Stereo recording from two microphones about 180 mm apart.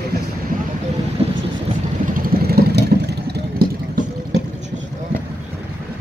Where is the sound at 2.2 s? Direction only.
60° right (ahead or behind).